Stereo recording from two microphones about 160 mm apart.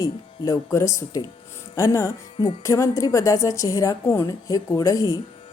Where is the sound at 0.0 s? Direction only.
20° left (ahead or behind).